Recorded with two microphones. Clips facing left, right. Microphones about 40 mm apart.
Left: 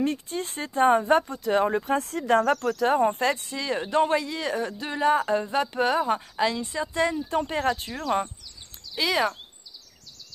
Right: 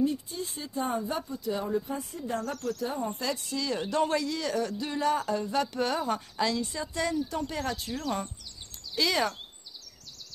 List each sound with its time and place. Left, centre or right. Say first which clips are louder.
0.0 s speech: left 2 dB; left
3.5 s speech: left 4 dB; left
8.9 s speech: left 3 dB; centre